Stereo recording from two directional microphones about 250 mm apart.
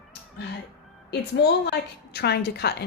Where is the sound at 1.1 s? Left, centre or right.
Left.